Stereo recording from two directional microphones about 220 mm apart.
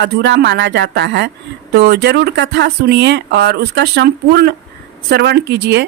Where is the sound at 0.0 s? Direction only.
50° right (ahead or behind).